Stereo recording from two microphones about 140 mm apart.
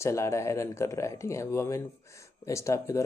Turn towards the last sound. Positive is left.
turn(degrees=20)  # may be behind; listen again after turning